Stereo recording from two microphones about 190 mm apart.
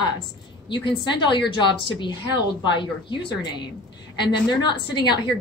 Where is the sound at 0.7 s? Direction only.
25° left (ahead or behind).